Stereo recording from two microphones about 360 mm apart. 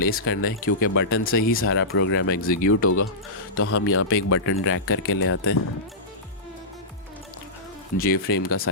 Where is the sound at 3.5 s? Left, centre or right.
Left.